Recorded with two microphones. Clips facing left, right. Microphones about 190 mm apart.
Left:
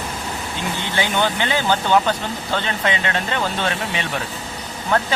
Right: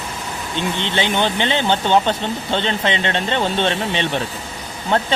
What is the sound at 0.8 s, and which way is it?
Speech, 20° right (ahead or behind).